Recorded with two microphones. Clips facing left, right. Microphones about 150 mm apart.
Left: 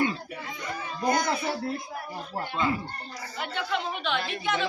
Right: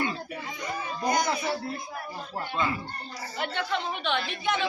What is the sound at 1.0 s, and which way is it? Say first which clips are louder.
Speech: left 1 dB; 15° right (ahead or behind).